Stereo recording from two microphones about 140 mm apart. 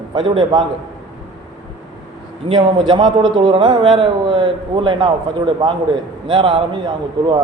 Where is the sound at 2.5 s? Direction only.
35° right (ahead or behind).